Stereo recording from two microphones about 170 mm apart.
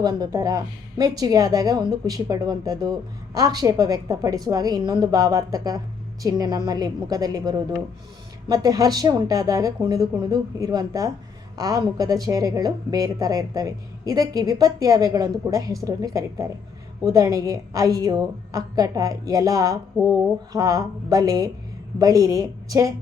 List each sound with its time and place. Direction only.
0.0 s a woman's voice: 20° right (ahead or behind)